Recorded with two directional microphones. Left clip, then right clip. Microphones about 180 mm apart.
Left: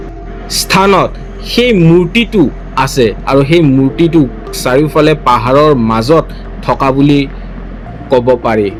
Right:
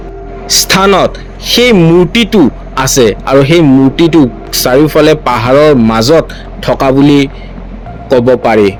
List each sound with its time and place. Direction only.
0.4 s a woman's voice: 35° right (ahead or behind)